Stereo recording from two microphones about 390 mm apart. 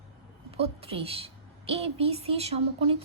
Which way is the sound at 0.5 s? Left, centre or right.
Centre.